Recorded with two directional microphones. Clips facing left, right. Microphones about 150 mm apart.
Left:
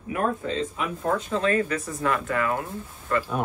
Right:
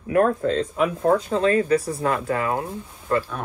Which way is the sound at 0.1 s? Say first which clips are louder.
Right 7 dB; 55° right (ahead or behind).